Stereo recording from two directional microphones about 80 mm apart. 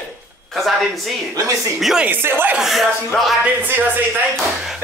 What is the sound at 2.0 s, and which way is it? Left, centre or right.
Speech, right.